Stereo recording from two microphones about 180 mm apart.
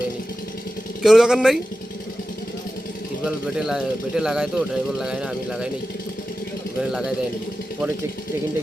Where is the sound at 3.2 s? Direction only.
5° right (ahead or behind).